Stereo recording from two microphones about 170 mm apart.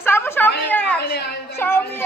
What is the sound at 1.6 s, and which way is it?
Music, 15° left (ahead or behind).